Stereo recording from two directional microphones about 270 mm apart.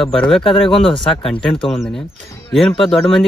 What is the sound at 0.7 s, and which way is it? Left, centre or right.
Speech, centre.